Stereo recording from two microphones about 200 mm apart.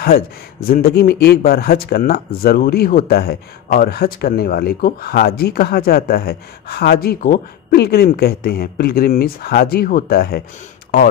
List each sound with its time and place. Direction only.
0.7 s speech: 50° left (ahead or behind)